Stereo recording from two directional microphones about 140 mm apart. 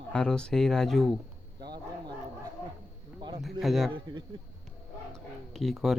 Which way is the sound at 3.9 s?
35° right (ahead or behind).